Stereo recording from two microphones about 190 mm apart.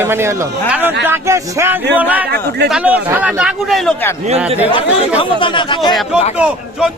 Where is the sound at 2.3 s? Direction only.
60° right (ahead or behind).